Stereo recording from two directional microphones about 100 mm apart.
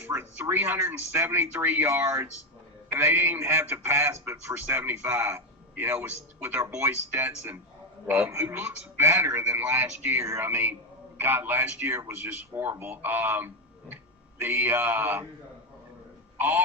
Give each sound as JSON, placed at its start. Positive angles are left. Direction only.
{"t": 0.0, "sound": "a man's voice", "side_deg": -20}
{"t": 9.6, "sound": "a man's voice", "side_deg": -15}
{"t": 16.4, "sound": "a man's voice", "side_deg": -20}